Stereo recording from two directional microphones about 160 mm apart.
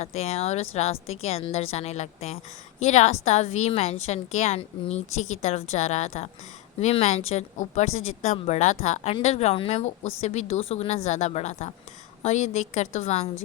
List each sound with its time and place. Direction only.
0.0 s a woman's voice: 40° left (ahead or behind)